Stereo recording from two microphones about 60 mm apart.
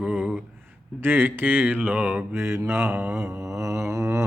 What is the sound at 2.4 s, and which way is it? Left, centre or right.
Mantra, right.